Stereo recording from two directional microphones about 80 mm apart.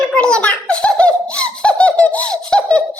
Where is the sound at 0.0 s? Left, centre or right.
Centre.